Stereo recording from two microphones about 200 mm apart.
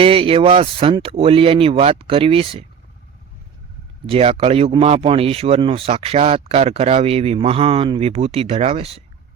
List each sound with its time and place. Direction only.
0.0 s speech: 25° right (ahead or behind)
4.0 s speech: 30° right (ahead or behind)